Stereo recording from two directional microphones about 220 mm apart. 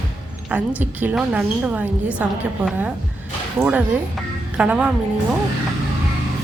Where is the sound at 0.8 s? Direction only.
5° right (ahead or behind).